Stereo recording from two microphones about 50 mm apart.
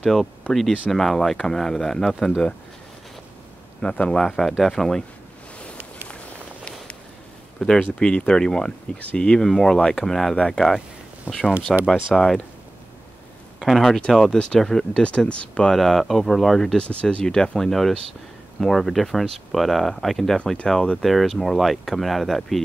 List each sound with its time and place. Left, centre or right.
0.0 s speech: centre
3.8 s speech: left
4.6 s speech: centre
7.5 s speech: centre
10.3 s speech: centre
11.3 s speech: right
11.8 s speech: centre
13.6 s speech: centre
15.0 s speech: left
15.7 s speech: centre
16.7 s speech: left
17.6 s speech: centre
21.0 s speech: centre